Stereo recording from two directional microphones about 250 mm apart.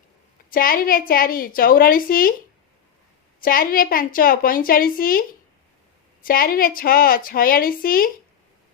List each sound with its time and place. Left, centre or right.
0.5 s a woman's voice: left
3.4 s a woman's voice: left
6.2 s a woman's voice: left